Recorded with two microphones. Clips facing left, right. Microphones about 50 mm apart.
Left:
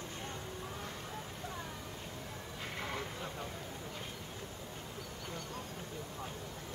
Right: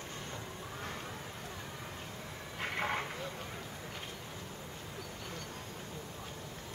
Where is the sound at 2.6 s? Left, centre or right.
Right.